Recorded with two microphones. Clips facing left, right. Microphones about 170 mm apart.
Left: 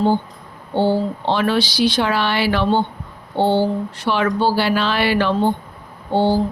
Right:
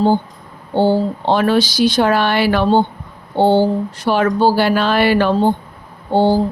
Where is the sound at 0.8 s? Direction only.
45° right (ahead or behind).